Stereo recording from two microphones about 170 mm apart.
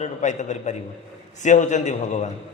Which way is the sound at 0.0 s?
45° left (ahead or behind).